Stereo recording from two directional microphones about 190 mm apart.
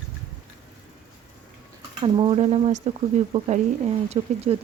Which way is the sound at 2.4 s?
35° right (ahead or behind).